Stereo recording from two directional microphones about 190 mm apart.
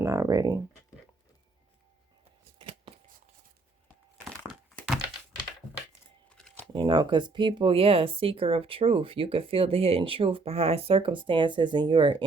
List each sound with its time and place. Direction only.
0.0 s speech: 15° right (ahead or behind)
2.6 s shuffling cards: 25° right (ahead or behind)
4.4 s thunk: 5° left (ahead or behind)
6.2 s crumpling: 5° left (ahead or behind)
6.7 s speech: 25° right (ahead or behind)